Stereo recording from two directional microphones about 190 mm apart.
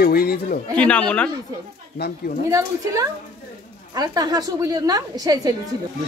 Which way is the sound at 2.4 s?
15° right (ahead or behind).